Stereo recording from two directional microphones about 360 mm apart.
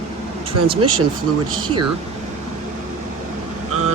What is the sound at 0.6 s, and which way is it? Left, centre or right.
Speech, right.